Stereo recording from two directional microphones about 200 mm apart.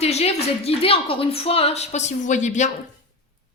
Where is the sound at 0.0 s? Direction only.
30° left (ahead or behind).